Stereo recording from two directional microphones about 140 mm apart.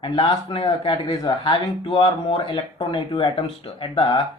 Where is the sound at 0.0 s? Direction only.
35° left (ahead or behind).